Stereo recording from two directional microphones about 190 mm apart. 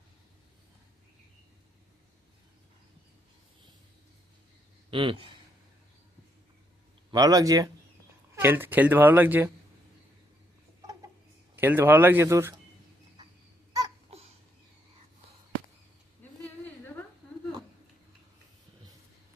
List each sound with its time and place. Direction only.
4.9 s speech: 25° right (ahead or behind)
7.1 s speech: 20° right (ahead or behind)
11.5 s speech: 10° right (ahead or behind)
14.1 s babbling: 30° right (ahead or behind)